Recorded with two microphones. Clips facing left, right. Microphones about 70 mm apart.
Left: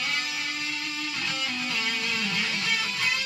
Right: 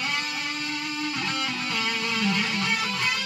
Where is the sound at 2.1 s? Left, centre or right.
Right.